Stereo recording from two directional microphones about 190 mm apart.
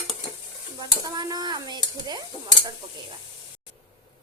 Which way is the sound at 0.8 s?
20° right (ahead or behind).